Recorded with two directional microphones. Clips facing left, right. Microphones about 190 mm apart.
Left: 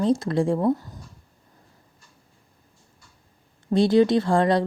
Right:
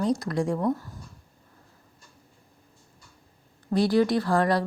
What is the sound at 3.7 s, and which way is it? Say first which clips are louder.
Speech: left 4 dB; 25° left (ahead or behind).